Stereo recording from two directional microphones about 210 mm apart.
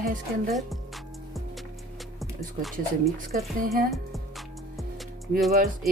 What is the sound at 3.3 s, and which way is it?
Speech, centre (ahead or behind).